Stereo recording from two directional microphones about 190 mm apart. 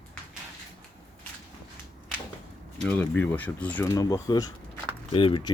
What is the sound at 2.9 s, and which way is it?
Speech, 10° left (ahead or behind).